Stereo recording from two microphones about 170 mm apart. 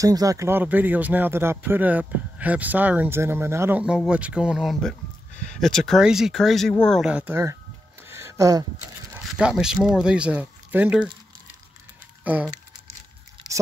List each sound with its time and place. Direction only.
0.0 s speech: 20° right (ahead or behind)
8.1 s a sound: 15° right (ahead or behind)
9.1 s speech: 5° right (ahead or behind)
12.2 s speech: 10° right (ahead or behind)